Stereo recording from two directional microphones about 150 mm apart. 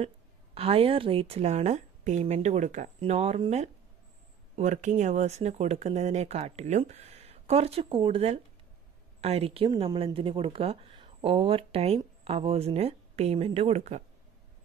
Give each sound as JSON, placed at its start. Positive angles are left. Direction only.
{"t": 0.6, "sound": "a woman's voice", "side_deg": -40}